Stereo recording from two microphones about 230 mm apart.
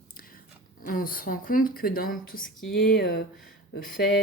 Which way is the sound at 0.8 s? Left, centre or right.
Left.